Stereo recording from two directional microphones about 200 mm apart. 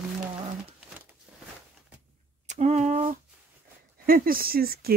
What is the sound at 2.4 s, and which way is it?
Speech, 35° right (ahead or behind).